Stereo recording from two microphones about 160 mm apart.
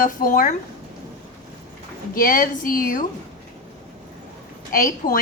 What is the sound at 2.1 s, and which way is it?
Speech, 60° left (ahead or behind).